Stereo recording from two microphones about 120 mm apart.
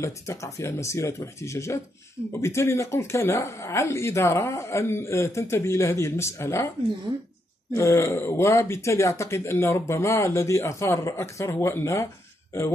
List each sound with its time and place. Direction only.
0.0 s speech: 25° left (ahead or behind)
7.7 s speech: 25° left (ahead or behind)